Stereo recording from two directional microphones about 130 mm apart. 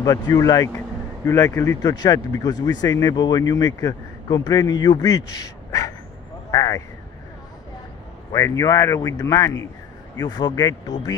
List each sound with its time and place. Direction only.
0.0 s speech: 30° left (ahead or behind)
6.5 s a sound: 25° left (ahead or behind)
8.3 s speech: 25° left (ahead or behind)